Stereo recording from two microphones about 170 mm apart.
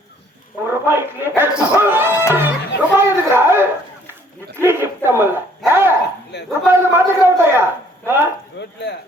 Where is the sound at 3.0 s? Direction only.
15° right (ahead or behind).